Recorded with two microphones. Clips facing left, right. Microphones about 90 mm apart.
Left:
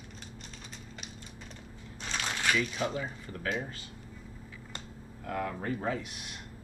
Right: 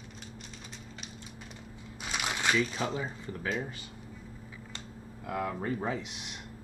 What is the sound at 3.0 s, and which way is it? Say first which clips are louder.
Speech: right 1 dB; 25° right (ahead or behind).